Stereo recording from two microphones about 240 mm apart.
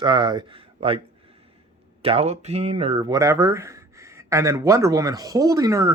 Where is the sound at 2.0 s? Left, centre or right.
Right.